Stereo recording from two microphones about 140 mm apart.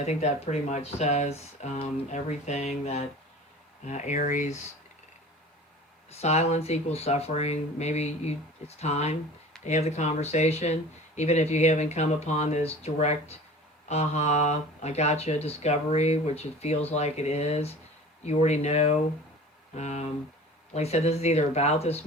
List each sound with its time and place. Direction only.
0.0 s speech: 50° left (ahead or behind)
6.1 s speech: 50° left (ahead or behind)